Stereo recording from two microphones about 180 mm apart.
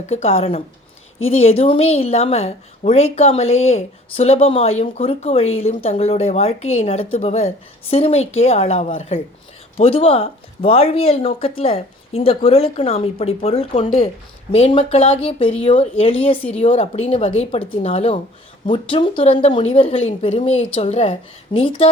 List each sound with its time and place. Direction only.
0.1 s speech: 35° left (ahead or behind)